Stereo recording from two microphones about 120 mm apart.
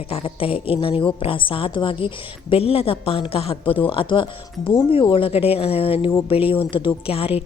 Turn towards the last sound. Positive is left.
turn(degrees=50)  # may be behind; listen again after turning